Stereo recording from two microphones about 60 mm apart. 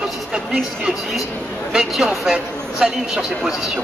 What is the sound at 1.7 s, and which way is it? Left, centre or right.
A man's voice, centre.